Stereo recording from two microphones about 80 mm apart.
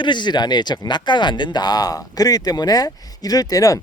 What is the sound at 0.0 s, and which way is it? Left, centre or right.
Speech, left.